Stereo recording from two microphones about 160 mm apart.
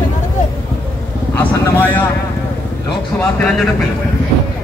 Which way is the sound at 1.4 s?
10° left (ahead or behind).